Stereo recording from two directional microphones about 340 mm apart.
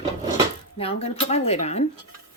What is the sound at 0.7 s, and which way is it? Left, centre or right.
Speech, centre.